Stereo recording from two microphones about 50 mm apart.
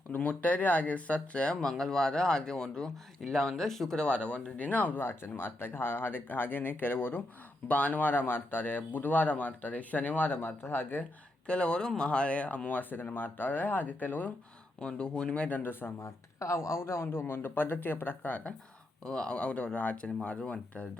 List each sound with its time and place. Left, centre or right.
0.2 s speech: left
1.7 s speech: centre
3.9 s speech: left
4.5 s speech: left
7.7 s speech: left
11.4 s speech: centre
14.8 s speech: left
15.4 s speech: left
16.0 s speech: left
19.0 s speech: centre; by 20.1 s left
20.4 s speech: centre